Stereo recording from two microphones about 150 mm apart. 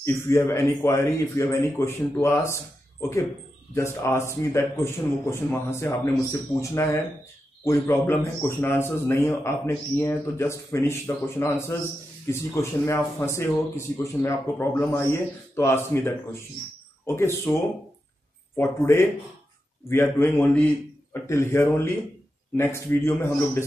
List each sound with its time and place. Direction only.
0.0 s speech: 15° left (ahead or behind)
3.7 s a man's voice: 20° left (ahead or behind)
18.6 s speech: 15° left (ahead or behind)